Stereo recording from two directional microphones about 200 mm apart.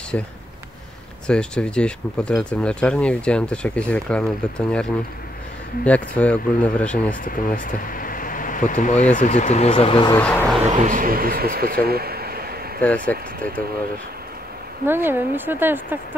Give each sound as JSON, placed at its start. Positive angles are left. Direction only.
{"t": 0.1, "sound": "speech", "side_deg": 5}
{"t": 5.9, "sound": "speech", "side_deg": 5}
{"t": 7.2, "sound": "speech", "side_deg": 45}
{"t": 10.2, "sound": "speech", "side_deg": 5}
{"t": 10.8, "sound": "speech", "side_deg": -40}
{"t": 12.8, "sound": "speech", "side_deg": 5}
{"t": 15.0, "sound": "speech", "side_deg": -10}